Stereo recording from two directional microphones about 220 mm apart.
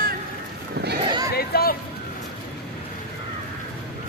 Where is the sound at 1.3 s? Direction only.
45° left (ahead or behind).